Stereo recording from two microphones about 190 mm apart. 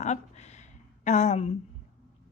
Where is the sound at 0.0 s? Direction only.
35° left (ahead or behind).